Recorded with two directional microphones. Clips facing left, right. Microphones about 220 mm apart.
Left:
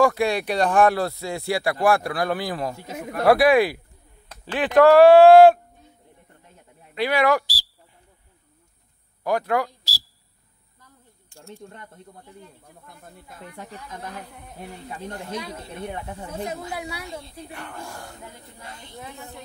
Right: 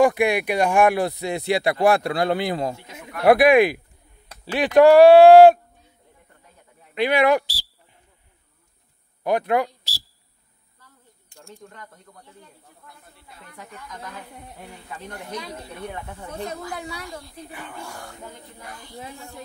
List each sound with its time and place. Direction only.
0.0 s speech: 15° right (ahead or behind)
2.8 s speech: 40° left (ahead or behind)
3.3 s speech: 15° right (ahead or behind)
7.0 s speech: 20° right (ahead or behind)
9.2 s speech: 20° right (ahead or behind)
11.7 s speech: 25° left (ahead or behind)
12.8 s speech: 50° left (ahead or behind)
13.6 s speech: 30° left (ahead or behind)
15.7 s speech: 25° left (ahead or behind)
17.4 s speech: centre (ahead or behind)
18.6 s speech: 20° left (ahead or behind)